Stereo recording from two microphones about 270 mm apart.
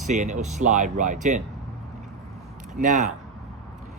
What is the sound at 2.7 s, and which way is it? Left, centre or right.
Speech, right.